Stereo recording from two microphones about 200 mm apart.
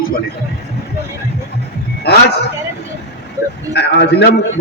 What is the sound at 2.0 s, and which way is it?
Speech, 55° left (ahead or behind).